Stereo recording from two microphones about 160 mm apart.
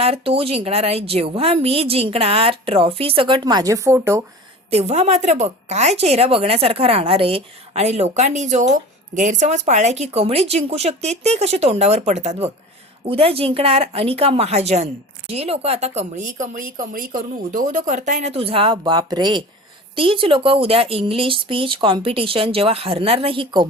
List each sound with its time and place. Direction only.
0.0 s a woman's voice: 35° right (ahead or behind); by 4.2 s 15° right (ahead or behind)
4.7 s a woman's voice: 40° right (ahead or behind)